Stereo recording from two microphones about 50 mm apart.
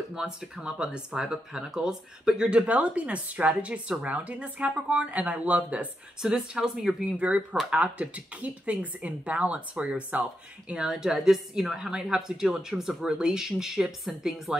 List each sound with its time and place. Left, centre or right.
0.1 s a woman's voice: centre; by 5.9 s right
6.2 s a woman's voice: centre
10.7 s a woman's voice: centre